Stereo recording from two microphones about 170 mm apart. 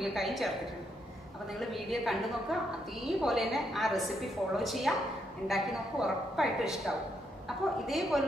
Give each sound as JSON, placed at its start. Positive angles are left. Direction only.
{"t": 0.0, "sound": "a woman's voice", "side_deg": 0}
{"t": 1.7, "sound": "a woman's voice", "side_deg": 0}
{"t": 3.2, "sound": "a woman's voice", "side_deg": 0}